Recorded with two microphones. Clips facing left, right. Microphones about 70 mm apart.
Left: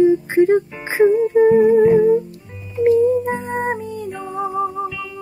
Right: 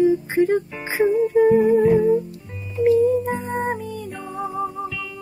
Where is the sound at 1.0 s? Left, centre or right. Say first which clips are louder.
Left 4 dB; centre.